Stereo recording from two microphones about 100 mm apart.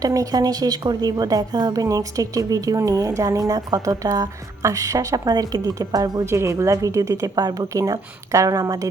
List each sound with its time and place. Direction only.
0.0 s speech: 35° right (ahead or behind)